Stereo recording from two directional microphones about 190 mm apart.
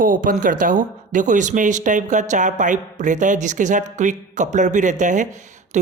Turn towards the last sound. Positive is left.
turn(degrees=-40)  # may be behind; listen again after turning